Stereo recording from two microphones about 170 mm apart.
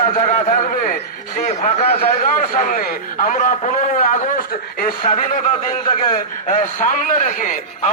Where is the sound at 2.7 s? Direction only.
55° left (ahead or behind).